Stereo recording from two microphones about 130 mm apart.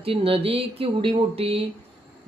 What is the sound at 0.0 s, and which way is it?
Speech, 45° right (ahead or behind).